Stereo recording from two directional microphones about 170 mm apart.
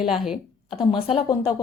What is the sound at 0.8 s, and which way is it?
Speech, 30° left (ahead or behind).